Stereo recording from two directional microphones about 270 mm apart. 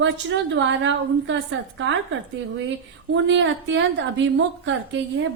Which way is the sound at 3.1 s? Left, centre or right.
Right.